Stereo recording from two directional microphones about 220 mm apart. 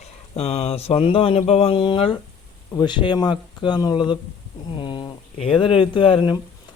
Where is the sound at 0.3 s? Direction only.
30° left (ahead or behind).